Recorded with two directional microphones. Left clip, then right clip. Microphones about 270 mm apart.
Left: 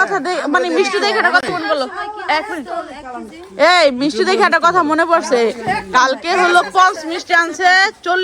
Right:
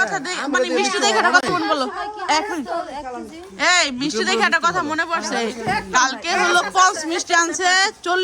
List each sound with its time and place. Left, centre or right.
0.0 s speech: centre; by 1.9 s right
3.6 s speech: centre